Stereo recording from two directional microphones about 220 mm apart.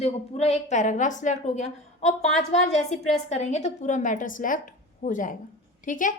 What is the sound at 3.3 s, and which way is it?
A woman's voice, 30° left (ahead or behind).